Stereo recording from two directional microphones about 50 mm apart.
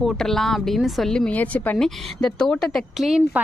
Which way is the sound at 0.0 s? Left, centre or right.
Centre.